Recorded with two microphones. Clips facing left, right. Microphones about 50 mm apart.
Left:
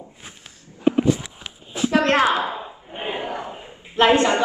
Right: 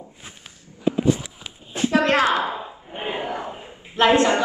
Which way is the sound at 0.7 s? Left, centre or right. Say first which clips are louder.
Left 2 dB; left.